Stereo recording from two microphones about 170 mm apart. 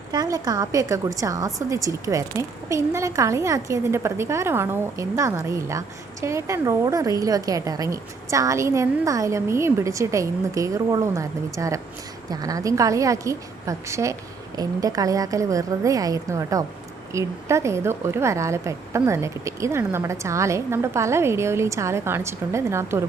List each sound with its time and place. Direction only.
0.1 s a woman's voice: 20° right (ahead or behind)